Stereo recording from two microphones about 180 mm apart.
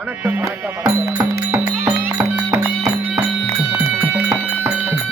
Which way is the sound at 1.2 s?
20° right (ahead or behind).